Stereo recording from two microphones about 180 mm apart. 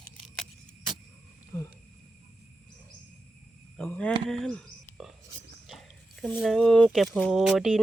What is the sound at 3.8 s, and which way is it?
Cricket, 5° left (ahead or behind).